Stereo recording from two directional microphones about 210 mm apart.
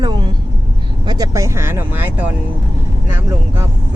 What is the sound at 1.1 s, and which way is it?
Vehicle, 15° right (ahead or behind).